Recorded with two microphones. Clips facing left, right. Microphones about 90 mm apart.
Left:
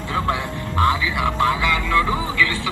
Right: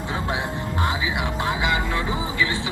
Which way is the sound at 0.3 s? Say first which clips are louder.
Left 2 dB; 20° right (ahead or behind).